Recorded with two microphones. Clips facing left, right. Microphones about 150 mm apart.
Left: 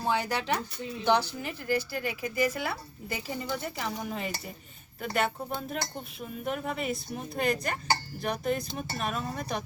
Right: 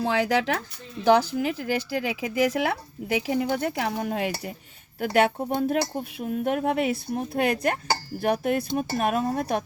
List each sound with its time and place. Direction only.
0.0 s speech: 90° right; by 9.6 s 55° right (ahead or behind)